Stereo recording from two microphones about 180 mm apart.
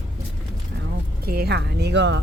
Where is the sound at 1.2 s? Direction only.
60° right (ahead or behind); by 2.2 s 75° right (ahead or behind).